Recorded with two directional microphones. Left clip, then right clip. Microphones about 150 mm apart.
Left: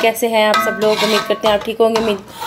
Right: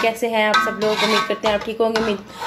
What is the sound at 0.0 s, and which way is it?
Speech, 10° left (ahead or behind).